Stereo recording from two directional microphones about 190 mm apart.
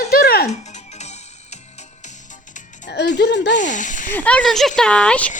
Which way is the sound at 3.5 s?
40° left (ahead or behind).